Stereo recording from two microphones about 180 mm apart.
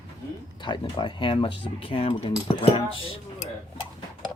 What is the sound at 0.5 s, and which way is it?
Speech, 25° left (ahead or behind).